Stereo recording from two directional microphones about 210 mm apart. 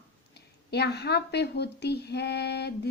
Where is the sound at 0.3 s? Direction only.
50° left (ahead or behind).